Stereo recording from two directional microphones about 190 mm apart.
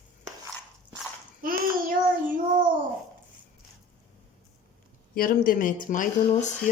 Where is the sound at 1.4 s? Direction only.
50° right (ahead or behind).